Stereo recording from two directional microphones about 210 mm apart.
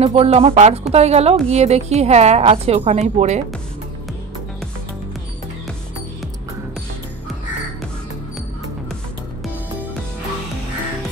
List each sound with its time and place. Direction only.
0.0 s a woman's voice: 30° right (ahead or behind)